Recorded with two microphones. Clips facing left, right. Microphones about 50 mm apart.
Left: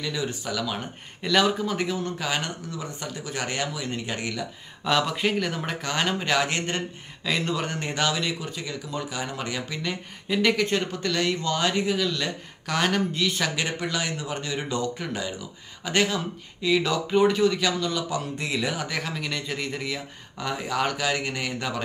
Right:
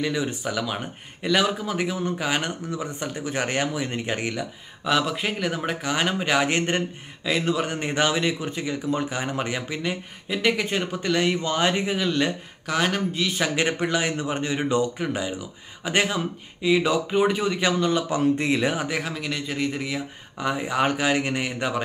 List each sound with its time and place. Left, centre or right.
0.0 s speech: right
4.8 s speech: centre; by 6.8 s right
7.2 s speech: centre; by 9.9 s right
10.2 s speech: centre; by 12.3 s right
12.6 s speech: centre
13.6 s speech: right
18.9 s speech: centre